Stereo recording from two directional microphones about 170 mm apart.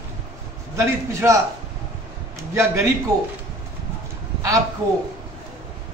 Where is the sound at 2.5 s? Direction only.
15° right (ahead or behind).